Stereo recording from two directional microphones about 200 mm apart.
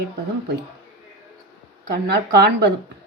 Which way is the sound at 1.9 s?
55° right (ahead or behind).